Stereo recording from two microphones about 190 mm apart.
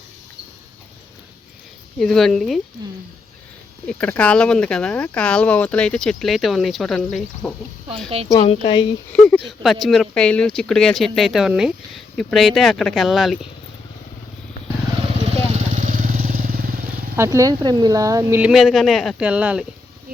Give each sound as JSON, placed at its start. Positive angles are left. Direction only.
{"t": 2.0, "sound": "speech", "side_deg": 0}
{"t": 3.8, "sound": "speech", "side_deg": 5}
{"t": 8.4, "sound": "speech", "side_deg": 30}
{"t": 9.1, "sound": "speech", "side_deg": 5}
{"t": 15.4, "sound": "vehicle", "side_deg": -35}
{"t": 17.2, "sound": "speech", "side_deg": -15}